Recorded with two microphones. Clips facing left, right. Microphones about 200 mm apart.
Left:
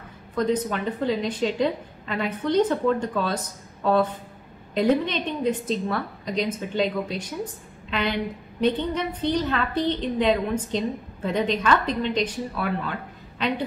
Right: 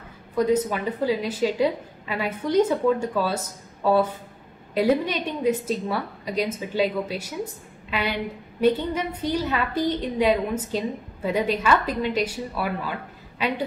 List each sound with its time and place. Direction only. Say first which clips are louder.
0.3 s a woman's voice: right 2 dB; 10° right (ahead or behind)